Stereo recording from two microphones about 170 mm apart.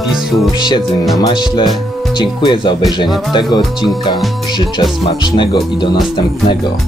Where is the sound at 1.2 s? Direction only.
25° left (ahead or behind).